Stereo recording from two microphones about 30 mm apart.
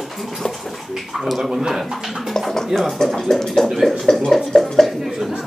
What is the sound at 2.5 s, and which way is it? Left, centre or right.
Speech, centre.